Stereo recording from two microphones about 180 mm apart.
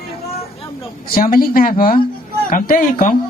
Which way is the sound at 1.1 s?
55° left (ahead or behind).